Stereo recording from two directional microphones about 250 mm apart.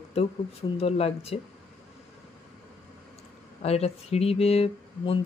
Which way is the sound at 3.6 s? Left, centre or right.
Left.